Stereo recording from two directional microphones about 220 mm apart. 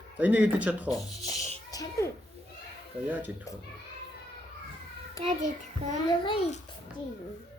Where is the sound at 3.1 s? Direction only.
10° right (ahead or behind).